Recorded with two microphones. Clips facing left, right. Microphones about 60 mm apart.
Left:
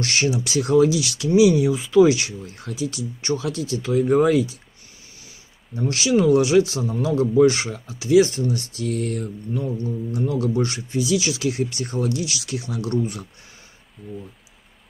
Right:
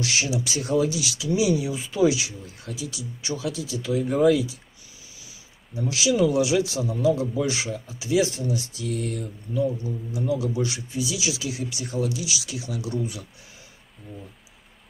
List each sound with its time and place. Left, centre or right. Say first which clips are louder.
0.0 s speech: left 4 dB; left
5.8 s speech: left 2 dB; left
14.0 s speech: left 7 dB; centre